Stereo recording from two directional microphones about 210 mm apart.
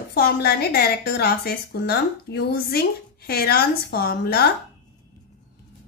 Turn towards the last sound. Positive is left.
turn(degrees=50)  # may be behind; listen again after turning